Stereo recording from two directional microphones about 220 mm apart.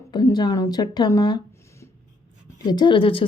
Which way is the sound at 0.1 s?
20° left (ahead or behind).